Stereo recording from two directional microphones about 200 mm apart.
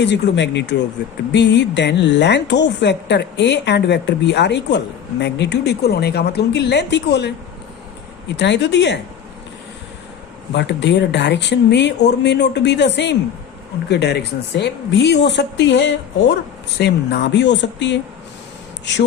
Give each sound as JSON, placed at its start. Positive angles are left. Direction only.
{"t": 0.0, "sound": "a woman's voice", "side_deg": 60}
{"t": 8.4, "sound": "a woman's voice", "side_deg": 60}
{"t": 10.5, "sound": "a woman's voice", "side_deg": 60}